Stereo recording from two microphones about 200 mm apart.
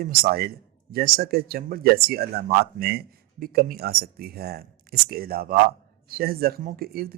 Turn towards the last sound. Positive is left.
turn(degrees=-50)  # may be behind; listen again after turning